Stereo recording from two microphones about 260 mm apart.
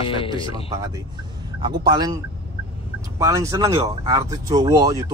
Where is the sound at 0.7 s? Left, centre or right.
Centre.